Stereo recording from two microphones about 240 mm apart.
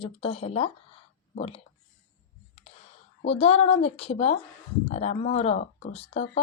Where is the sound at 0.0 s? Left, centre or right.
Left.